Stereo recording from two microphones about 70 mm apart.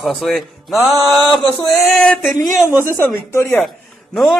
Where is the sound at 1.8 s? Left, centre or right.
Centre.